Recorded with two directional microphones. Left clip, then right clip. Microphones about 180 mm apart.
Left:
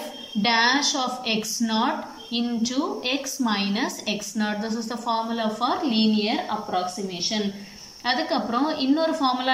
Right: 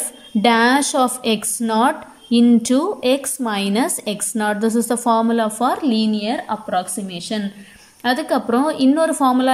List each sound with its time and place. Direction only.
0.4 s speech: 45° right (ahead or behind)
8.0 s a woman's voice: 40° right (ahead or behind)